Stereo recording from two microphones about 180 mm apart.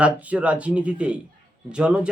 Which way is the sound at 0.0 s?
5° right (ahead or behind).